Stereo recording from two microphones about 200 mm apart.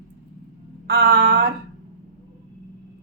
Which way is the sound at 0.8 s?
50° right (ahead or behind).